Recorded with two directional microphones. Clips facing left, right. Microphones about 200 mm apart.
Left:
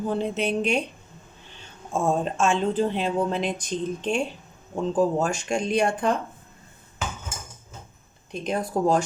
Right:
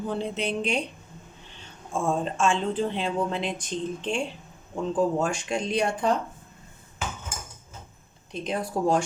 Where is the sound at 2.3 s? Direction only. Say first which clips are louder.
Left 2 dB; 40° left (ahead or behind).